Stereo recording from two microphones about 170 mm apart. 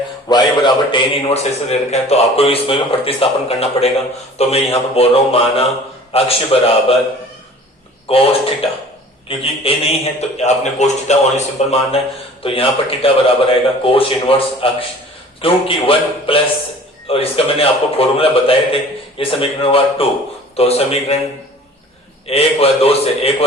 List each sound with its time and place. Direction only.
0.3 s a man's voice: 25° left (ahead or behind)
8.0 s a man's voice: 35° left (ahead or behind)
22.3 s a man's voice: 35° left (ahead or behind)